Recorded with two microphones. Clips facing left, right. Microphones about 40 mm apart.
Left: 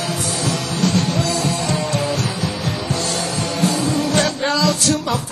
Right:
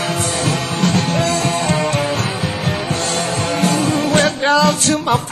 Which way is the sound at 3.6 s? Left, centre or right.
Right.